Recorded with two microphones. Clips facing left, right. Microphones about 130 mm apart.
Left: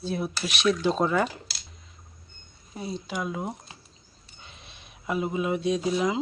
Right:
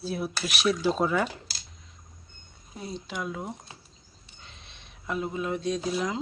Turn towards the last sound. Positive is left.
turn(degrees=5)  # may be behind; listen again after turning